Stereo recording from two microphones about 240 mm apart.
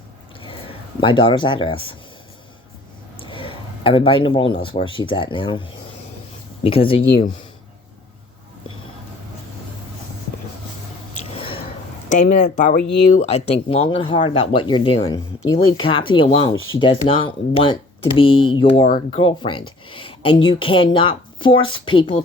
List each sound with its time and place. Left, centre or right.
1.0 s speech: centre
3.2 s speech: left
11.3 s a sound: left
12.0 s speech: left
16.6 s speech: left
16.8 s speech: left